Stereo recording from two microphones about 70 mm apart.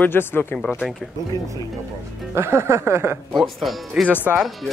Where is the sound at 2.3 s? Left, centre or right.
Right.